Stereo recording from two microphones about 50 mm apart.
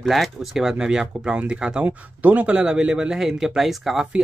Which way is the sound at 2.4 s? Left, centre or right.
Centre.